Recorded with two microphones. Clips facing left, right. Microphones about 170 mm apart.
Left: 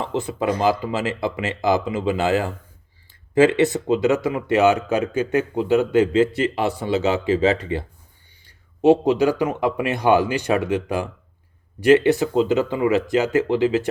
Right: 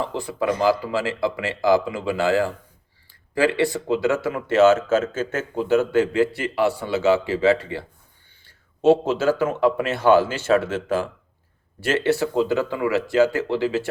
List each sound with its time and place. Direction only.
0.0 s speech: 20° left (ahead or behind)
8.4 s a sound: 15° left (ahead or behind)
9.4 s speech: 15° left (ahead or behind)